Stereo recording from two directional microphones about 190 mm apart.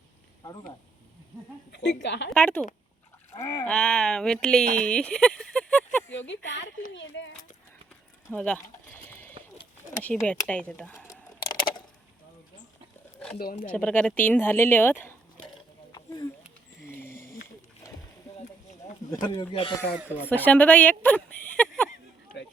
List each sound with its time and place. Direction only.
0.4 s speech: 20° left (ahead or behind)
1.7 s a woman's voice: 65° left (ahead or behind)
2.3 s speech: 5° left (ahead or behind)
3.7 s speech: 5° left (ahead or behind)
6.1 s speech: 70° left (ahead or behind)
8.3 s a sound: 5° left (ahead or behind)
10.0 s speech: 5° left (ahead or behind)
11.1 s typing: 20° left (ahead or behind)
13.7 s speech: 5° left (ahead or behind)
15.9 s a sound: 20° left (ahead or behind)
19.1 s speech: 20° left (ahead or behind)
20.2 s speech: 10° left (ahead or behind)
21.5 s a sound: 5° left (ahead or behind)